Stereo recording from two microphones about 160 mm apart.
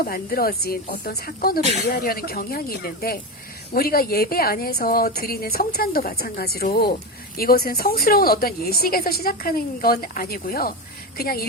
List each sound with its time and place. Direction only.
0.0 s speech: 65° left (ahead or behind)